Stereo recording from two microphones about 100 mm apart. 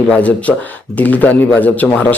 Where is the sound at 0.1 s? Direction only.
15° left (ahead or behind).